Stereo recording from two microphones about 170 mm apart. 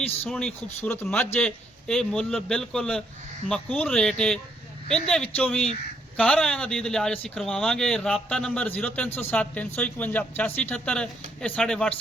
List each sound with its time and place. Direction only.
0.3 s a man's voice: 5° left (ahead or behind)